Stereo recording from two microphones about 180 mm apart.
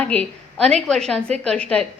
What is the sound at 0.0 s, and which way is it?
A woman's voice, 5° left (ahead or behind).